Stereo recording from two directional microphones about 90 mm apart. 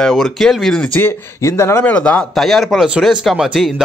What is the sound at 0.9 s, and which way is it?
Speech, 25° left (ahead or behind).